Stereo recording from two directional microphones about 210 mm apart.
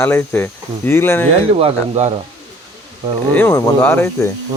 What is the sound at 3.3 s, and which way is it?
Speech, 10° left (ahead or behind).